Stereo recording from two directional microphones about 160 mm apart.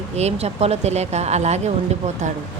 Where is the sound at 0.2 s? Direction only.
40° right (ahead or behind).